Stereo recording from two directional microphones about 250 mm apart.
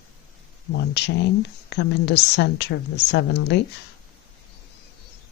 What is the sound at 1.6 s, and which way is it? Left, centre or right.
A woman's voice, left.